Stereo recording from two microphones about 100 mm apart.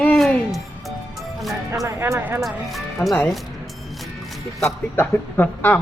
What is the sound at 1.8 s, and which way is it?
Speech, 25° right (ahead or behind).